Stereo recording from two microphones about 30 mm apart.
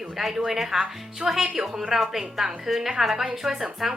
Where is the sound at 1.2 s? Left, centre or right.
Right.